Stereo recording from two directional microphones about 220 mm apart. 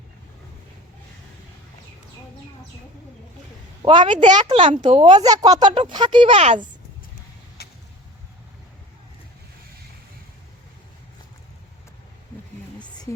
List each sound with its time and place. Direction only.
3.8 s speech: 30° right (ahead or behind)
7.6 s vehicle: 45° left (ahead or behind)